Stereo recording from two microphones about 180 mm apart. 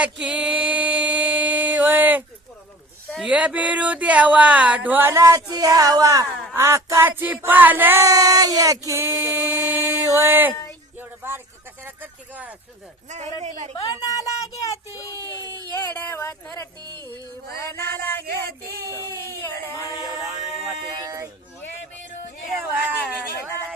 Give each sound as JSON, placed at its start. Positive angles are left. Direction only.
{"t": 0.0, "sound": "music", "side_deg": -5}
{"t": 3.2, "sound": "a sound", "side_deg": -10}
{"t": 11.9, "sound": "speech", "side_deg": -10}
{"t": 13.4, "sound": "speech", "side_deg": -40}
{"t": 14.0, "sound": "speech", "side_deg": 20}
{"t": 15.7, "sound": "speech", "side_deg": 20}
{"t": 16.8, "sound": "music", "side_deg": -20}
{"t": 17.7, "sound": "speech", "side_deg": 10}
{"t": 20.9, "sound": "speech", "side_deg": -20}